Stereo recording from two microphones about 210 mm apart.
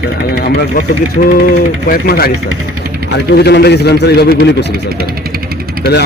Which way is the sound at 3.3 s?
50° left (ahead or behind).